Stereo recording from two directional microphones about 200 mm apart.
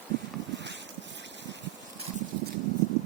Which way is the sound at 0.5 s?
60° right (ahead or behind).